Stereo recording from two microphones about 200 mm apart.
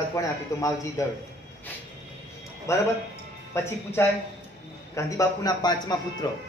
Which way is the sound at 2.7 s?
15° left (ahead or behind).